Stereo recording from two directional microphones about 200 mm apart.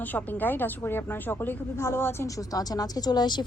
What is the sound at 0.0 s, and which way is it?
A woman's voice, 10° left (ahead or behind).